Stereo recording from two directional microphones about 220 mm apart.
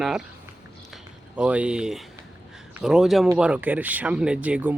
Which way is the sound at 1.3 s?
5° right (ahead or behind).